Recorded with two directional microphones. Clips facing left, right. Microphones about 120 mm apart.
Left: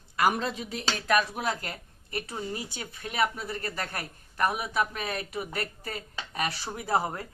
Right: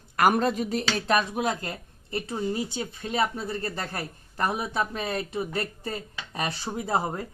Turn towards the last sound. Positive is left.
turn(degrees=-25)  # may be behind; listen again after turning